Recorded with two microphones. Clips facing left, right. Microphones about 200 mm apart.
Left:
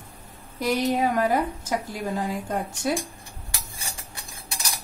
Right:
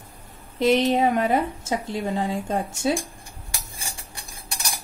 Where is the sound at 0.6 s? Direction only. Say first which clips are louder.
Right 4 dB; 25° right (ahead or behind).